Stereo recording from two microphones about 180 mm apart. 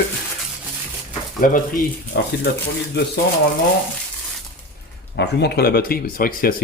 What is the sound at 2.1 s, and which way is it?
Speech, 65° left (ahead or behind).